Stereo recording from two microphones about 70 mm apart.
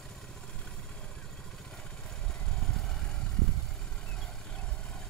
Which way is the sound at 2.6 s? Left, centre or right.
Centre.